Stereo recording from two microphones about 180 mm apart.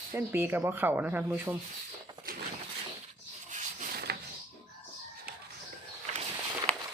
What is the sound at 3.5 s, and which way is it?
Rub, 45° right (ahead or behind).